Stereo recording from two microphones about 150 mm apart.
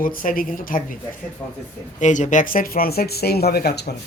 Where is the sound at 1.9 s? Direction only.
55° left (ahead or behind); by 3.8 s 90° left.